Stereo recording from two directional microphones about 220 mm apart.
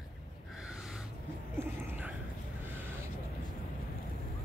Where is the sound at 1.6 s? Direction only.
10° right (ahead or behind).